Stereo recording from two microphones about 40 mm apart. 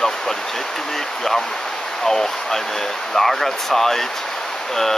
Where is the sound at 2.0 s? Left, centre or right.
Centre.